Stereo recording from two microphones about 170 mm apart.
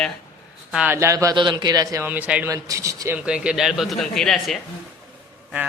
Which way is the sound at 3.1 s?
5° right (ahead or behind).